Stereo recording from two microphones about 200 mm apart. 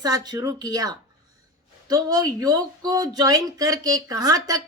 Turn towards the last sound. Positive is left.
turn(degrees=-20)  # may be behind; listen again after turning